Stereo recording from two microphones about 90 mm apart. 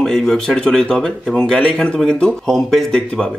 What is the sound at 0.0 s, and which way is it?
A man's voice, 5° left (ahead or behind).